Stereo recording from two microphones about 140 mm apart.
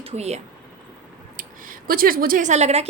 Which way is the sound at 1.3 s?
80° right.